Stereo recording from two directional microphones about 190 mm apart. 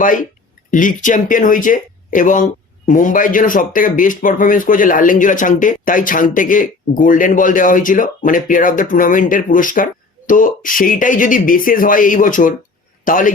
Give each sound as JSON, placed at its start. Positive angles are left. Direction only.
{"t": 0.0, "sound": "speech", "side_deg": 45}